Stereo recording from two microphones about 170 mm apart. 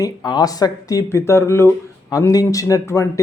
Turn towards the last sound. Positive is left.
turn(degrees=20)  # may be behind; listen again after turning